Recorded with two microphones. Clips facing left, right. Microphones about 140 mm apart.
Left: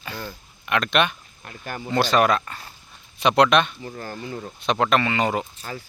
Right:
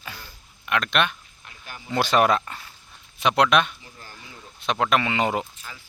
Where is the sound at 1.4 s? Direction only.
50° left (ahead or behind).